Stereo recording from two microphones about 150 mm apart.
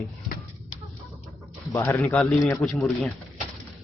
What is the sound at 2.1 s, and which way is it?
Speech, centre (ahead or behind).